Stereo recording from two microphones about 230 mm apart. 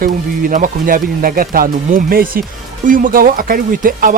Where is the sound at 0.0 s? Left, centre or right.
Right.